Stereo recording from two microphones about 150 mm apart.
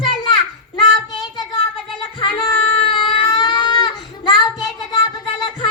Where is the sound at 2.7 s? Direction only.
35° left (ahead or behind).